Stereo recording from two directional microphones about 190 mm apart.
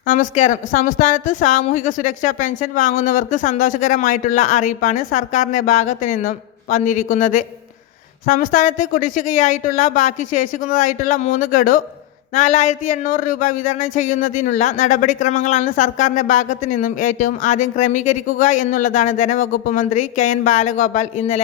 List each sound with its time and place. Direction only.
0.1 s speech: 40° left (ahead or behind)